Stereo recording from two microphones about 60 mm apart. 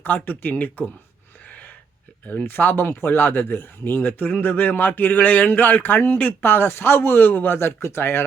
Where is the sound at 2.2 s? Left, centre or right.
Left.